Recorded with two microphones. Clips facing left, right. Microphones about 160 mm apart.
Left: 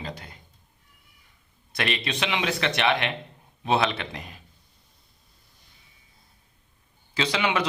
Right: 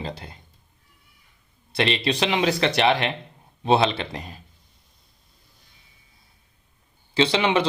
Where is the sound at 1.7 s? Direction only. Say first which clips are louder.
Right 6 dB; 30° right (ahead or behind).